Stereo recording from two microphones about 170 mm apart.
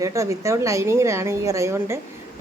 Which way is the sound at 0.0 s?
20° right (ahead or behind).